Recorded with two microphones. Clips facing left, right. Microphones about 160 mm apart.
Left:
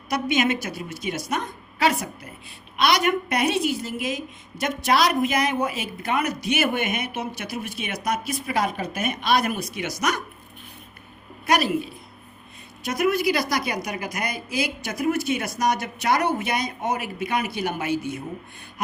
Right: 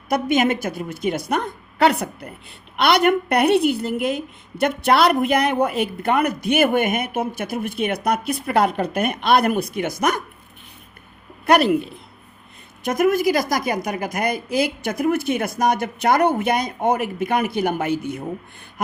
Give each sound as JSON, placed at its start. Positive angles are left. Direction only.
{"t": 0.1, "sound": "a woman's voice", "side_deg": -50}
{"t": 11.4, "sound": "a woman's voice", "side_deg": -60}
{"t": 12.8, "sound": "a woman's voice", "side_deg": -50}